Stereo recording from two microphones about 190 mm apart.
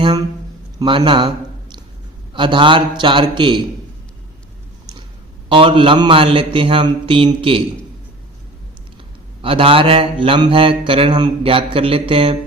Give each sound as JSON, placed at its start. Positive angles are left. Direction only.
{"t": 0.8, "sound": "mantra", "side_deg": -25}
{"t": 2.3, "sound": "mantra", "side_deg": -25}
{"t": 5.5, "sound": "mantra", "side_deg": -25}
{"t": 9.4, "sound": "mantra", "side_deg": -30}